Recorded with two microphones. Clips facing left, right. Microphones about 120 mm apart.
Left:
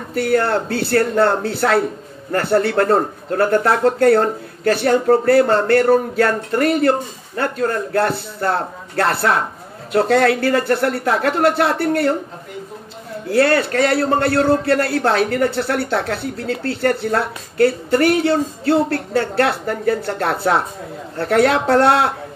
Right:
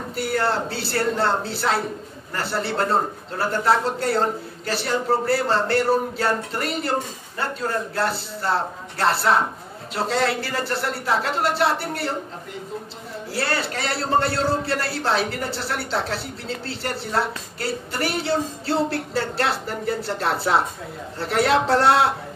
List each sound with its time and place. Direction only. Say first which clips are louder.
0.1 s a man's voice: left 7 dB; 55° left (ahead or behind)
13.3 s a man's voice: left 11 dB; 55° left (ahead or behind)